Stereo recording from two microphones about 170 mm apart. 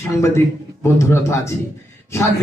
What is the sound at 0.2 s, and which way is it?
Speech, 15° left (ahead or behind).